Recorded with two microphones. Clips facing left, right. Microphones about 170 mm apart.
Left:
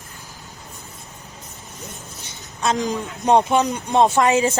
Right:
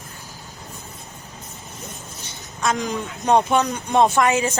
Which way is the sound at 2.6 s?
25° left (ahead or behind).